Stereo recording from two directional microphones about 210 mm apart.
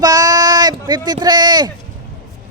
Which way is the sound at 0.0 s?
15° right (ahead or behind).